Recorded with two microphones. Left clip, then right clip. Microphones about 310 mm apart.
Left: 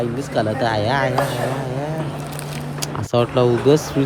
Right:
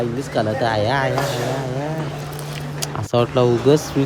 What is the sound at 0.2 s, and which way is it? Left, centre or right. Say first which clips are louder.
Speech: even; centre.